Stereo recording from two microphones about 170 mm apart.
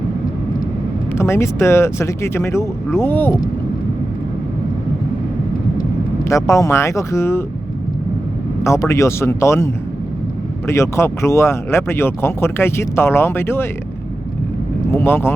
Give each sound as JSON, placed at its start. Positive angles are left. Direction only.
{"t": 1.1, "sound": "speech", "side_deg": 15}
{"t": 6.2, "sound": "speech", "side_deg": 15}
{"t": 8.6, "sound": "speech", "side_deg": 15}
{"t": 10.7, "sound": "speech", "side_deg": 15}
{"t": 14.9, "sound": "speech", "side_deg": 15}